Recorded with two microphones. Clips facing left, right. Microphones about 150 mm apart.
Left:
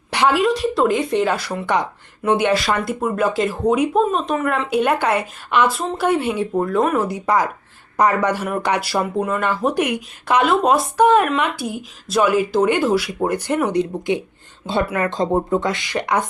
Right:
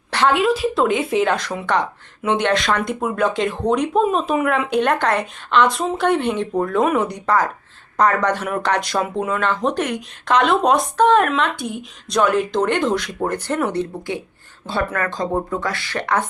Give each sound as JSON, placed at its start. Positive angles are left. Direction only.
{"t": 0.1, "sound": "a sound", "side_deg": 15}
{"t": 0.3, "sound": "speech", "side_deg": 0}
{"t": 7.3, "sound": "speech", "side_deg": 15}